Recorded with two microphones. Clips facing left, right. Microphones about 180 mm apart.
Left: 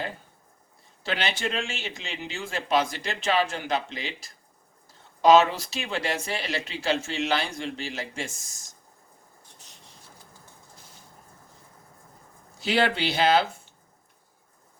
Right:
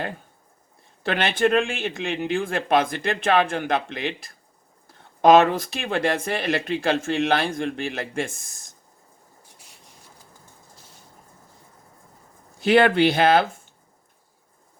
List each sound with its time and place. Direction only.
1.0 s speech: 55° right (ahead or behind)
12.5 s speech: 55° right (ahead or behind)